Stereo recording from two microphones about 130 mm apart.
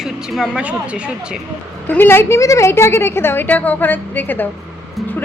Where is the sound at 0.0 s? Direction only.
5° right (ahead or behind).